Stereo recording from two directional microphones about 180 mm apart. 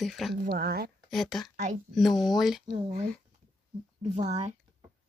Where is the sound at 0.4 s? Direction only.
60° right (ahead or behind).